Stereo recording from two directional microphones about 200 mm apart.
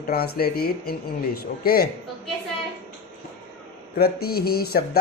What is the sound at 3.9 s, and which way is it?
Speech, 50° left (ahead or behind).